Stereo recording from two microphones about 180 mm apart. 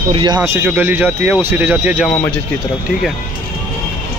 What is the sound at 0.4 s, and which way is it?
Speech, 10° right (ahead or behind).